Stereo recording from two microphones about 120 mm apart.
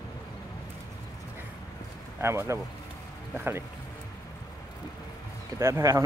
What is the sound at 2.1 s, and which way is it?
Speech, 20° right (ahead or behind).